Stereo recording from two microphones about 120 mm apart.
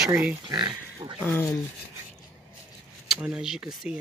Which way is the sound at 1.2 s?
15° left (ahead or behind).